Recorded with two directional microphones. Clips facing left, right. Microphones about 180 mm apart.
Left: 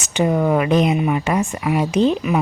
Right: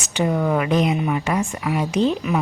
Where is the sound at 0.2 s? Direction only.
25° left (ahead or behind).